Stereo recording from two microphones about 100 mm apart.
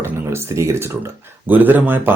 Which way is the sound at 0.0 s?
25° right (ahead or behind).